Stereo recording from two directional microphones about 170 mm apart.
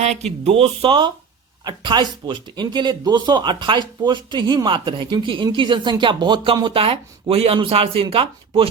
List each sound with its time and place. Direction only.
0.0 s speech: 40° right (ahead or behind)